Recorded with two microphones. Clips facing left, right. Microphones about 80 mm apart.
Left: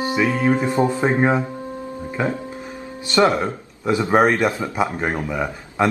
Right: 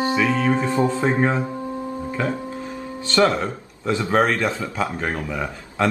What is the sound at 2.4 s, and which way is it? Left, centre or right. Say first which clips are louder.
A man's voice: right 2 dB; centre.